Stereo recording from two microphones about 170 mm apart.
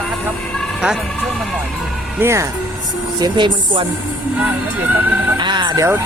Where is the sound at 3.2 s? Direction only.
25° right (ahead or behind).